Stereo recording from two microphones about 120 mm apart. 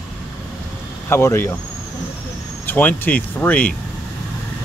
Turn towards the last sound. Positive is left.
turn(degrees=15)  # may be behind; listen again after turning